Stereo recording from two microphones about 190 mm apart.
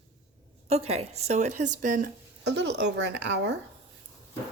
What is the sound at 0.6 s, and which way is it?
Speech, 35° right (ahead or behind).